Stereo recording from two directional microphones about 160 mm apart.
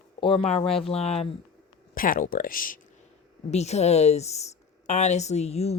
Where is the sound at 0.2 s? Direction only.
30° left (ahead or behind).